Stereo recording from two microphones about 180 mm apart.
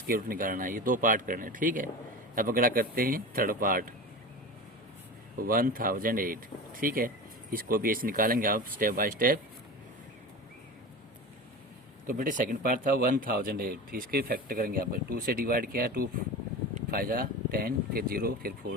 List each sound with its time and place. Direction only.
0.1 s speech: 50° right (ahead or behind)
5.4 s speech: 50° right (ahead or behind)
12.0 s speech: 50° right (ahead or behind)